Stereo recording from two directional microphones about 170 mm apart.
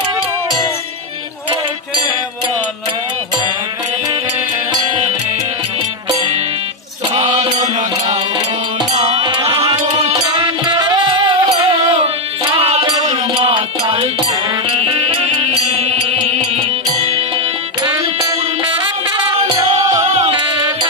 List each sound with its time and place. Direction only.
4.7 s music: 25° right (ahead or behind)
7.1 s a sound: 40° right (ahead or behind)
7.8 s music: 45° right (ahead or behind)
9.2 s music: 25° right (ahead or behind)
17.8 s music: 20° right (ahead or behind)
20.1 s music: 35° right (ahead or behind)